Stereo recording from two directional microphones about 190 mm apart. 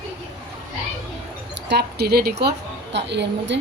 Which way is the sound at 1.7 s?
60° right (ahead or behind).